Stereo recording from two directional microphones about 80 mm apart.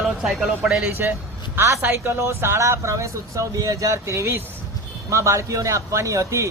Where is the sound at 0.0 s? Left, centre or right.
Centre.